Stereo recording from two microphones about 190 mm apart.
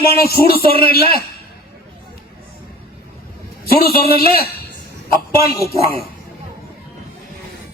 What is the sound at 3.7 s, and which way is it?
Speech, 55° left (ahead or behind).